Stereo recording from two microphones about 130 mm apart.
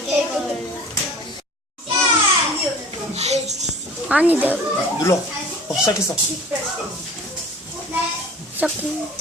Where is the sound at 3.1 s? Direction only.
55° right (ahead or behind).